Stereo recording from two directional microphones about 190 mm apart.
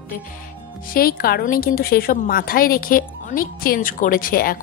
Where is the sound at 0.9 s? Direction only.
50° left (ahead or behind).